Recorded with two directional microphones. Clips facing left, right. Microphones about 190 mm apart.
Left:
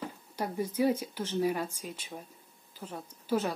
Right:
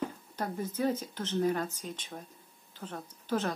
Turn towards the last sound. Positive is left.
turn(degrees=10)  # may be behind; listen again after turning